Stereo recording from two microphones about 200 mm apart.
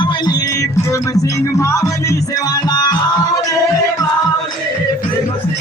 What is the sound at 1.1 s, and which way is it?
Music, 15° left (ahead or behind).